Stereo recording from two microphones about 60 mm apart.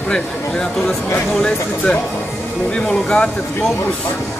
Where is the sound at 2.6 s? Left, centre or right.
Centre.